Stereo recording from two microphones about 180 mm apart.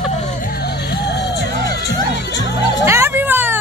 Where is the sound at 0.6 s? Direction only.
65° left (ahead or behind).